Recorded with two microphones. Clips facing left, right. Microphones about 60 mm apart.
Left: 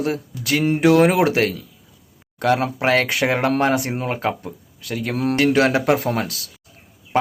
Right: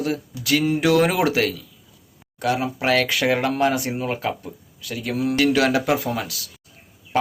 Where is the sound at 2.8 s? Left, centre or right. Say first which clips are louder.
Left 2 dB; left.